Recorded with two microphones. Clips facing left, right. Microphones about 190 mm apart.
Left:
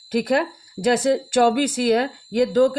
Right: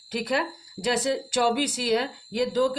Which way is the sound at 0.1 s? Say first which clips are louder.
Left 7 dB; 50° left (ahead or behind).